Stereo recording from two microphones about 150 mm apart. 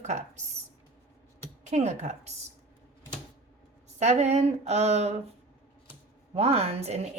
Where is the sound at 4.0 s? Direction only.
45° right (ahead or behind).